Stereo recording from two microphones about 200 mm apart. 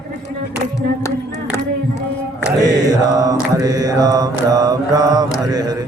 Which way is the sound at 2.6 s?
20° right (ahead or behind).